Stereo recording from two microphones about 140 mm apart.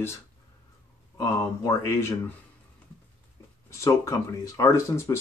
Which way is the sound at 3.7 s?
20° left (ahead or behind).